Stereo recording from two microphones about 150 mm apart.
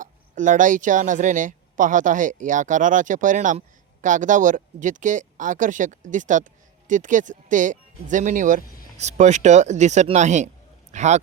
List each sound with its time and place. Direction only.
0.0 s speech: 60° right (ahead or behind)
9.0 s speech: 50° right (ahead or behind)